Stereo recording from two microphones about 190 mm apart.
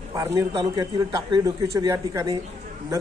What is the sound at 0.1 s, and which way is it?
A man's voice, 20° right (ahead or behind).